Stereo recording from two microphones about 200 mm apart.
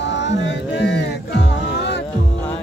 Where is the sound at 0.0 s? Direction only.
60° left (ahead or behind).